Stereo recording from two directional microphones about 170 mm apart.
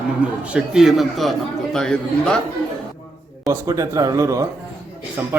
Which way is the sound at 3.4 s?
20° right (ahead or behind).